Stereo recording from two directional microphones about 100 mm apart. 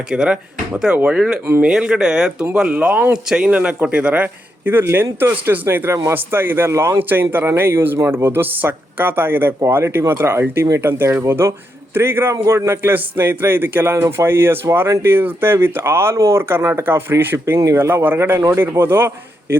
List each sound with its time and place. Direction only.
0.1 s a man's voice: 5° right (ahead or behind); by 19.5 s 25° right (ahead or behind)